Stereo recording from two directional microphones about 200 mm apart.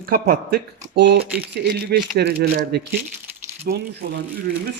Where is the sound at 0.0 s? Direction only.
45° right (ahead or behind).